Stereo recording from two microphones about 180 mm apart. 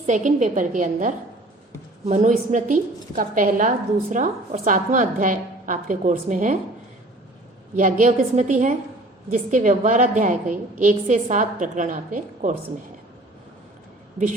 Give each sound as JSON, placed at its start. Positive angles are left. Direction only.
{"t": 0.0, "sound": "a woman's voice", "side_deg": -45}
{"t": 7.8, "sound": "a woman's voice", "side_deg": -45}